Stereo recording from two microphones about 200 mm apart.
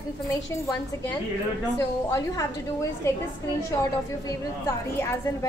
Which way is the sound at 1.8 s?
15° left (ahead or behind).